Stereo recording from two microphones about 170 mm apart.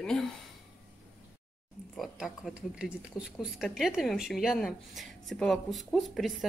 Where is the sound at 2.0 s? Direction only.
Centre (ahead or behind).